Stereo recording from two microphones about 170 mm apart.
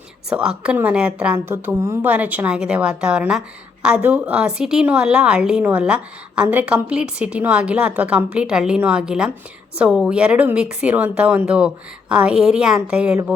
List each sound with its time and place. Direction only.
0.3 s a woman's voice: 5° right (ahead or behind)